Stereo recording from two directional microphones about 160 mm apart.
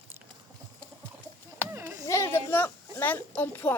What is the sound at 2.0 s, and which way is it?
Speech, 15° left (ahead or behind).